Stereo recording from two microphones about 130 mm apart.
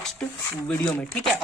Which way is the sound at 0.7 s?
15° left (ahead or behind).